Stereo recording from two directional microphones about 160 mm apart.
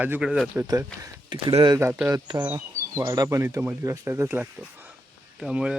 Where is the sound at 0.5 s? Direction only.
15° right (ahead or behind).